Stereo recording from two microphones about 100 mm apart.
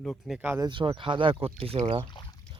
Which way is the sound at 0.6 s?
50° right (ahead or behind).